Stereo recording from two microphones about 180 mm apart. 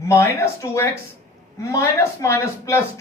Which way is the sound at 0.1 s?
15° left (ahead or behind).